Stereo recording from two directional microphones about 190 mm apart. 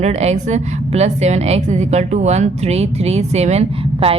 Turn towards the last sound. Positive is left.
turn(degrees=-30)  # may be behind; listen again after turning